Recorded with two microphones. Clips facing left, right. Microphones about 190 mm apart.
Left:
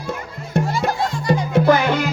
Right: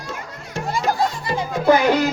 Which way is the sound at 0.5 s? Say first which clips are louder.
Left 1 dB; 60° left (ahead or behind).